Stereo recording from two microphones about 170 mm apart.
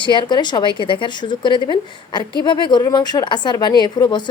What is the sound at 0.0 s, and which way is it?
A woman's voice, 25° left (ahead or behind).